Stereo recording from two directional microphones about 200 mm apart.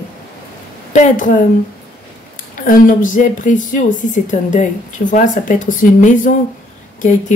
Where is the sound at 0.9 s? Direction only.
40° left (ahead or behind).